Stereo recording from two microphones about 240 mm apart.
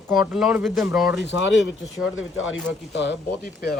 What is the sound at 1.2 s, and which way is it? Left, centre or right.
Speech, left.